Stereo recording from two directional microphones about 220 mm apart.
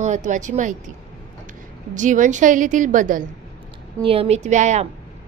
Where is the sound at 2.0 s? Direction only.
35° right (ahead or behind).